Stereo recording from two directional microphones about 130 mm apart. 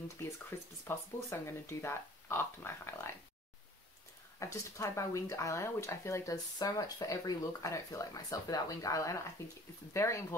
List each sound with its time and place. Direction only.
0.2 s speech: 20° left (ahead or behind)
4.4 s speech: 25° left (ahead or behind)